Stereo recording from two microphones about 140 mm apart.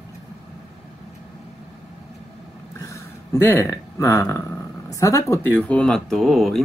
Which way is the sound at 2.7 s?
20° left (ahead or behind).